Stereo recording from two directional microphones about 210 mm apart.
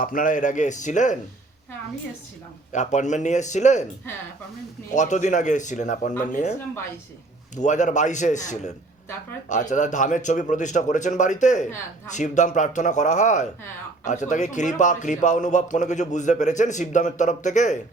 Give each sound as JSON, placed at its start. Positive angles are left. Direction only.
{"t": 0.0, "sound": "a man's voice", "side_deg": 40}
{"t": 2.7, "sound": "a man's voice", "side_deg": 35}
{"t": 4.9, "sound": "a man's voice", "side_deg": 35}
{"t": 7.5, "sound": "a man's voice", "side_deg": 35}